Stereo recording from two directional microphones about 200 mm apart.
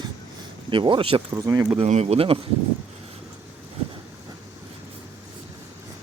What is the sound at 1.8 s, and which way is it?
Speech, 30° right (ahead or behind).